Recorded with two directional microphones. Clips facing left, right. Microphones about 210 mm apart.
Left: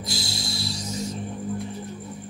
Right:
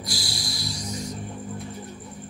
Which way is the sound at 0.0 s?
25° left (ahead or behind).